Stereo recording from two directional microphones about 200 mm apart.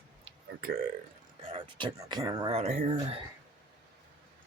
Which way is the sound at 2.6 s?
35° right (ahead or behind).